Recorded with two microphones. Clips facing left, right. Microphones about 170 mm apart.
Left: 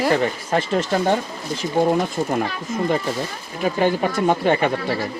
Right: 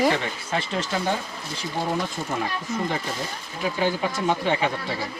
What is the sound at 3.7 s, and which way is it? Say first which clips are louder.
Speech: left 5 dB; 50° left (ahead or behind).